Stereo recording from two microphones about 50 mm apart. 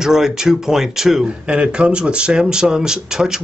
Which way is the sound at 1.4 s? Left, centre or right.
Right.